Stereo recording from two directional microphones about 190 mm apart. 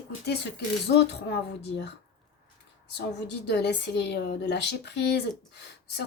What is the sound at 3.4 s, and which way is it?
Speech, 65° left (ahead or behind).